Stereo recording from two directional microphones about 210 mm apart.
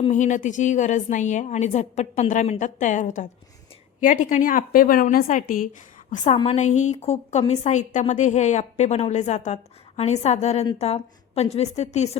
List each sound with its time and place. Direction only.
0.1 s a woman's voice: 35° left (ahead or behind)